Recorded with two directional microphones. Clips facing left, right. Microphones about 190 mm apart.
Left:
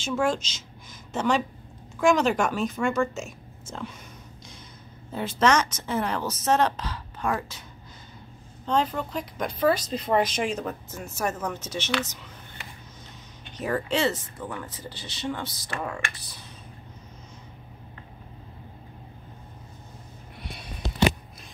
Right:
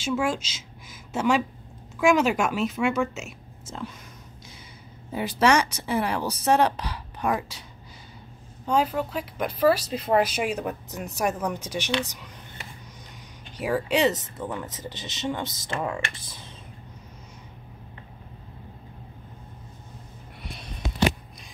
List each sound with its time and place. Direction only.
0.0 s a woman's voice: 5° right (ahead or behind)
5.1 s speech: 10° right (ahead or behind)
8.6 s speech: 10° right (ahead or behind)
13.6 s speech: 10° right (ahead or behind)